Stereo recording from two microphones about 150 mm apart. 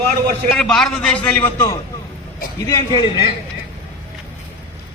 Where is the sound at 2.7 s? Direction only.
25° left (ahead or behind).